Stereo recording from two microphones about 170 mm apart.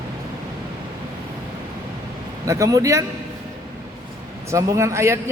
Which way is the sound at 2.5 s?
20° right (ahead or behind).